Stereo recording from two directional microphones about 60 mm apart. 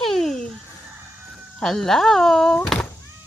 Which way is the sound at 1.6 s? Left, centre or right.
Centre.